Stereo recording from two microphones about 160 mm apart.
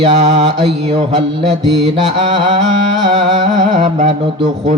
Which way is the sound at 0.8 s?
30° right (ahead or behind).